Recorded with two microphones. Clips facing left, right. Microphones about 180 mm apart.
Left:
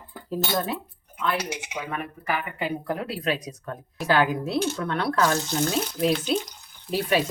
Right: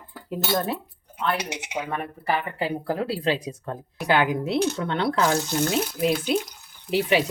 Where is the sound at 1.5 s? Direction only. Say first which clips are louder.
Right 2 dB; 30° right (ahead or behind).